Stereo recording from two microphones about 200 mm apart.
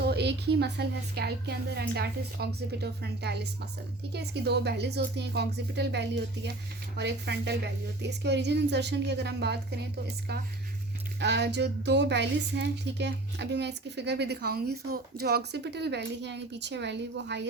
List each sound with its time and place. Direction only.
0.0 s speech: 55° right (ahead or behind)
11.2 s speech: 60° right (ahead or behind)